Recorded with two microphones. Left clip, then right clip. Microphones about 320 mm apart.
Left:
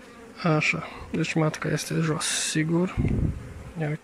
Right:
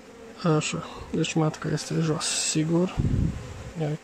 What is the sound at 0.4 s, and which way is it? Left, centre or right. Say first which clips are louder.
Speech: left 2 dB; centre.